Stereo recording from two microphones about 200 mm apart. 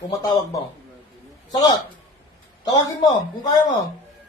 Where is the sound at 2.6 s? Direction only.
20° left (ahead or behind).